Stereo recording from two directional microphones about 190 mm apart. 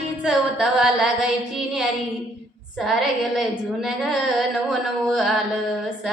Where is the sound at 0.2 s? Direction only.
5° right (ahead or behind).